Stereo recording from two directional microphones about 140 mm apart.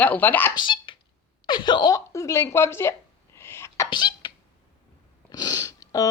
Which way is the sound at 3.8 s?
35° left (ahead or behind).